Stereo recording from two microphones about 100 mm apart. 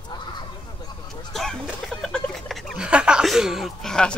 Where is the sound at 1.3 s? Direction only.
5° left (ahead or behind).